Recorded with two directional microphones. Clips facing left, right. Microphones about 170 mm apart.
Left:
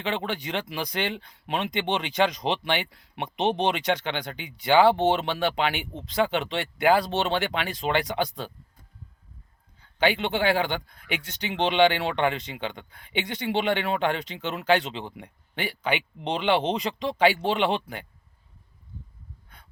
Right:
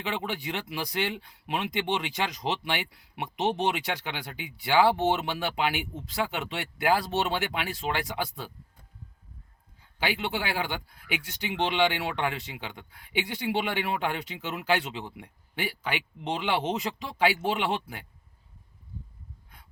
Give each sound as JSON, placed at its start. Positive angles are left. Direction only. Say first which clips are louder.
{"t": 0.0, "sound": "a man's voice", "louder": "left 3 dB", "side_deg": -5}
{"t": 9.8, "sound": "a man's voice", "louder": "left 6 dB", "side_deg": -5}